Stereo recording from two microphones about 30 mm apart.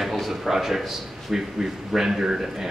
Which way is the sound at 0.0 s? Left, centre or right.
Centre.